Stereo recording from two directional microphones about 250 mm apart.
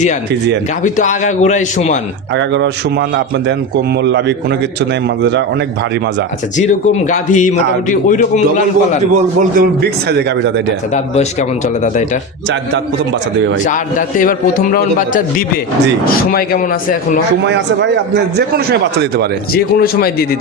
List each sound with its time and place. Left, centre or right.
0.8 s speech: left
2.3 s a man's voice: right
6.6 s a man's voice: left
9.1 s a man's voice: right
10.9 s speech: left
13.7 s a man's voice: left
17.4 s a man's voice: right
19.5 s a man's voice: left